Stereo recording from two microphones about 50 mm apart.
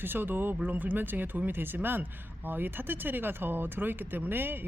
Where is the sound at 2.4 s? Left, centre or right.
Right.